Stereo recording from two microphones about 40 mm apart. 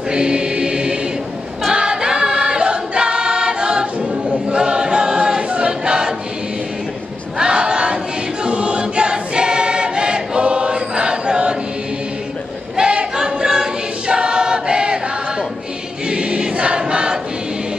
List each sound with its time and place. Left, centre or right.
0.1 s choir: right
7.3 s crowd: right
8.5 s choir: right
12.7 s choir: right